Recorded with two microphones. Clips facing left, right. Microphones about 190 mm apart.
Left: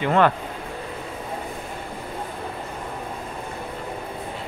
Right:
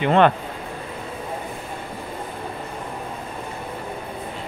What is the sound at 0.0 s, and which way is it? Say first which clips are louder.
Speech: right 3 dB; 20° right (ahead or behind).